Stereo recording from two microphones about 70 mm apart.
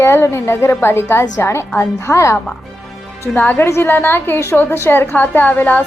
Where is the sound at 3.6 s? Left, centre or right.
Left.